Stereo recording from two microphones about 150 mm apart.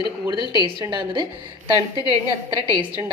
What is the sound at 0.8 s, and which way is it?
A woman's voice, 30° right (ahead or behind).